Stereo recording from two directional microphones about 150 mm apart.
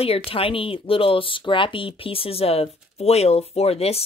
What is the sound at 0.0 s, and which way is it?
Speech, 40° left (ahead or behind).